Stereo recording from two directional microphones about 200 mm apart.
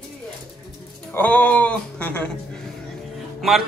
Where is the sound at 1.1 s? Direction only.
10° left (ahead or behind).